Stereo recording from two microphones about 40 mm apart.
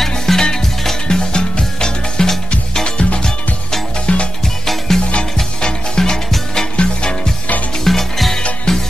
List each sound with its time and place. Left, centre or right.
0.3 s music: centre; by 4.3 s left
4.6 s music: centre
5.4 s music: centre
7.8 s music: centre